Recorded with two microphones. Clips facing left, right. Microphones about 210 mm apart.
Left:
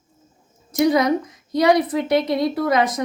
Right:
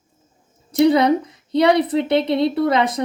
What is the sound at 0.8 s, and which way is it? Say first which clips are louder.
A woman's voice: right 3 dB; 30° right (ahead or behind).